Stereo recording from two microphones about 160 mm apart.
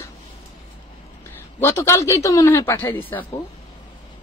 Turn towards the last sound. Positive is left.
turn(degrees=10)  # may be behind; listen again after turning